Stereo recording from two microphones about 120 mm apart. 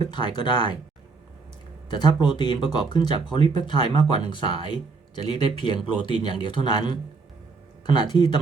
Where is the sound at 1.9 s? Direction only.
40° left (ahead or behind).